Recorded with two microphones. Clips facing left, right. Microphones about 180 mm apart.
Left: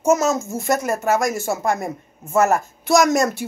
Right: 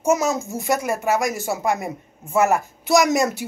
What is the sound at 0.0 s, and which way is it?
Speech, 10° right (ahead or behind).